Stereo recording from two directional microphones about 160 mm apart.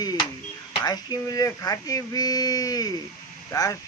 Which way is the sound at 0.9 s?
25° left (ahead or behind).